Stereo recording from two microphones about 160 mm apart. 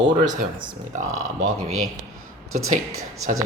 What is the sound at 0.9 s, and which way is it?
Speech, 50° right (ahead or behind).